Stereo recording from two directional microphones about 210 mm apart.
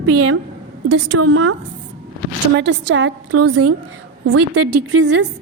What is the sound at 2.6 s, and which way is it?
A woman's voice, 55° right (ahead or behind).